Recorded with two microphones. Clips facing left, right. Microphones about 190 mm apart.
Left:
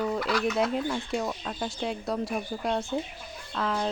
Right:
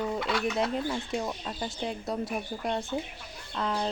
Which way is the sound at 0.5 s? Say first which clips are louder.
Left 2 dB; centre (ahead or behind).